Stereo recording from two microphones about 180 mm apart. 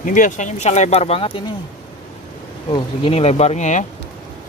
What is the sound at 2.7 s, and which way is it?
Speech, 30° left (ahead or behind).